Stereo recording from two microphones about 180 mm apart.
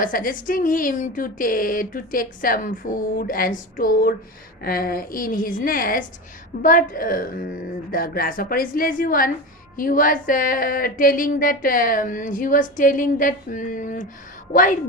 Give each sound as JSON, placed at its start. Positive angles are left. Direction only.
{"t": 0.0, "sound": "speech", "side_deg": 50}